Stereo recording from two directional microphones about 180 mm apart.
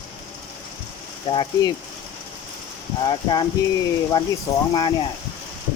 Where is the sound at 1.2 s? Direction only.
30° left (ahead or behind).